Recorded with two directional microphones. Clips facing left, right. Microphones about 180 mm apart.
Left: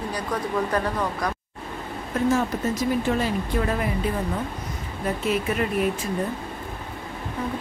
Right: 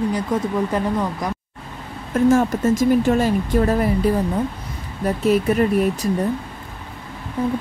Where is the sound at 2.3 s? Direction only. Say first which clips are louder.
Right 7 dB; 45° right (ahead or behind).